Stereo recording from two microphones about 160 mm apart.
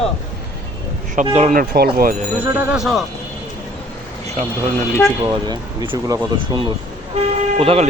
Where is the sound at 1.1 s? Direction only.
50° right (ahead or behind); by 1.9 s 70° right (ahead or behind).